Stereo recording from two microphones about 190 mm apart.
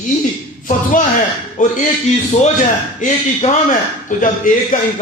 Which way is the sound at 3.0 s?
35° left (ahead or behind).